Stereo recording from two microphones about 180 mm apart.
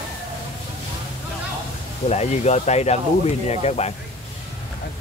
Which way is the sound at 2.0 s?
40° left (ahead or behind).